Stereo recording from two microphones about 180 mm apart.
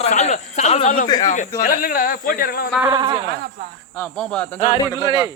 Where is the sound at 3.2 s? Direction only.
65° right (ahead or behind).